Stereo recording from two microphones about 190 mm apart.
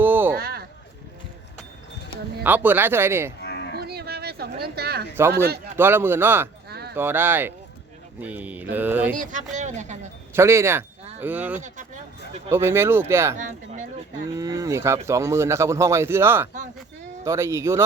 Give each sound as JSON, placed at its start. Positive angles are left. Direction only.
{"t": 0.0, "sound": "a sound", "side_deg": -10}
{"t": 0.3, "sound": "a sound", "side_deg": -55}
{"t": 2.4, "sound": "speech", "side_deg": -10}
{"t": 3.4, "sound": "livestock", "side_deg": 60}
{"t": 3.8, "sound": "a sound", "side_deg": -55}
{"t": 5.7, "sound": "speech", "side_deg": -10}
{"t": 6.7, "sound": "a sound", "side_deg": -55}
{"t": 6.9, "sound": "speech", "side_deg": -10}
{"t": 9.1, "sound": "a woman's voice", "side_deg": -40}
{"t": 10.3, "sound": "speech", "side_deg": -15}
{"t": 13.3, "sound": "a woman's voice", "side_deg": -40}
{"t": 14.3, "sound": "speech", "side_deg": -15}